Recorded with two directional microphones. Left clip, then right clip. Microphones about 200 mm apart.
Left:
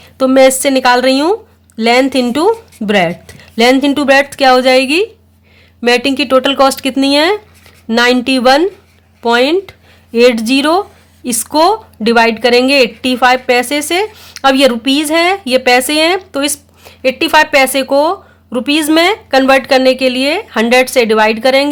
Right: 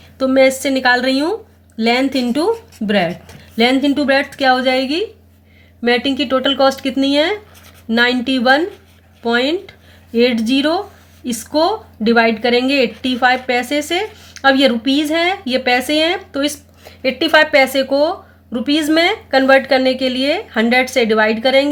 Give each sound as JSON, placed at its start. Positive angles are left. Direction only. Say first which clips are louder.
{"t": 0.2, "sound": "speech", "louder": "left 5 dB", "side_deg": 45}